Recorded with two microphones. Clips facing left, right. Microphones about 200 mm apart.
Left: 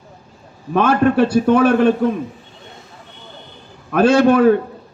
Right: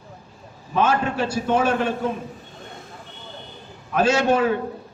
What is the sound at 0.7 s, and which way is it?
A man's voice, 60° left (ahead or behind).